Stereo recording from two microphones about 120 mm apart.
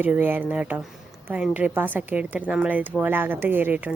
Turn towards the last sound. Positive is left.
turn(degrees=-15)  # may be behind; listen again after turning